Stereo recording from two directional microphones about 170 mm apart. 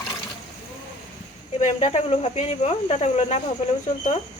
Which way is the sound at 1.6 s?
40° left (ahead or behind).